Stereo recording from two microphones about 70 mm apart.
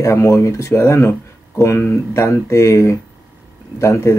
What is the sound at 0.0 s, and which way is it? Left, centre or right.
Speech, left.